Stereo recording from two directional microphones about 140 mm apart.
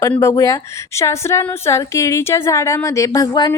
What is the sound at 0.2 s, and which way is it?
A woman's voice, 20° left (ahead or behind).